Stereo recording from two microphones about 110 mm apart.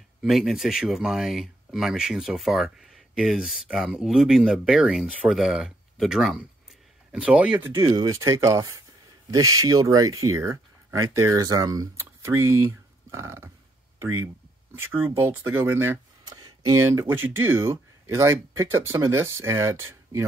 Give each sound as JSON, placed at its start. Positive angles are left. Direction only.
{"t": 0.2, "sound": "speech", "side_deg": 0}
{"t": 7.7, "sound": "speech", "side_deg": -35}
{"t": 12.0, "sound": "speech", "side_deg": -25}
{"t": 16.3, "sound": "a sound", "side_deg": -40}
{"t": 17.1, "sound": "speech", "side_deg": -20}